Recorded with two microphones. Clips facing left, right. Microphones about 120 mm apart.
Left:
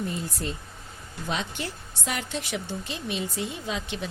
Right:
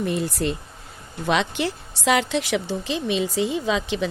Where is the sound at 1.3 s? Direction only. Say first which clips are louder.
Right 9 dB; 90° right.